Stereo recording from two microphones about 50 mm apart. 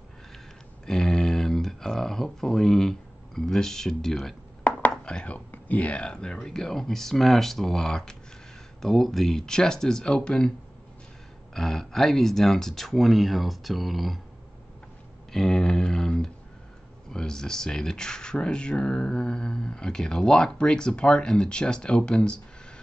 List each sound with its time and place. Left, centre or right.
0.8 s a sound: centre
5.0 s speech: left
11.5 s speech: centre
15.3 s speech: centre